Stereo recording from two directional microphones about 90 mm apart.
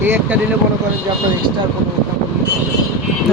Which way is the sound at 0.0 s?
25° right (ahead or behind).